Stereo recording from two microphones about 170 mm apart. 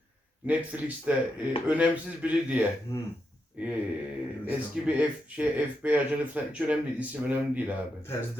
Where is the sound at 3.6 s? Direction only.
10° right (ahead or behind).